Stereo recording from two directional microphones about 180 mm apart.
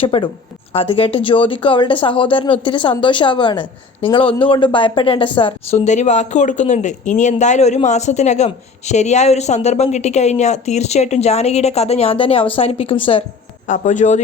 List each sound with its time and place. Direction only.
0.0 s speech: 30° left (ahead or behind)
13.7 s a man's voice: 45° left (ahead or behind)